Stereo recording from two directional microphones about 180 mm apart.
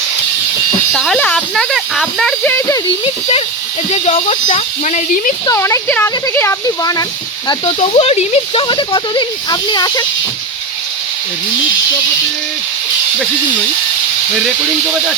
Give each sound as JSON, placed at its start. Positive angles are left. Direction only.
{"t": 0.9, "sound": "speech", "side_deg": 5}
{"t": 3.9, "sound": "speech", "side_deg": 35}
{"t": 5.5, "sound": "speech", "side_deg": 15}
{"t": 7.6, "sound": "speech", "side_deg": 35}